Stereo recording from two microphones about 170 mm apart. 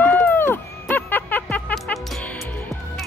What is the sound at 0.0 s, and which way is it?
Music, 10° left (ahead or behind).